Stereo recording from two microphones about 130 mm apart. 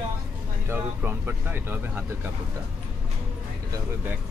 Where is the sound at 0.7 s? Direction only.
15° right (ahead or behind).